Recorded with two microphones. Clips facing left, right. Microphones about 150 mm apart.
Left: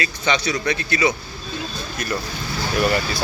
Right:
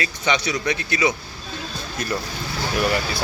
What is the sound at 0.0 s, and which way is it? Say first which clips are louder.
Speech: left 1 dB; 20° right (ahead or behind).